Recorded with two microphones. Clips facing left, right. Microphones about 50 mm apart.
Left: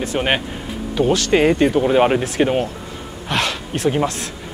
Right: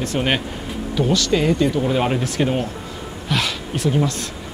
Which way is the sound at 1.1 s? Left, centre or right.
Left.